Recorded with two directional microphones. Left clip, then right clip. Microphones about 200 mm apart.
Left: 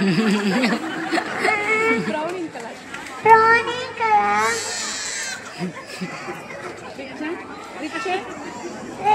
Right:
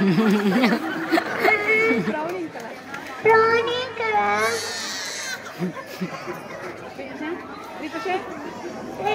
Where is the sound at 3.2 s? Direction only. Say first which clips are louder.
Left 4 dB; 35° right (ahead or behind).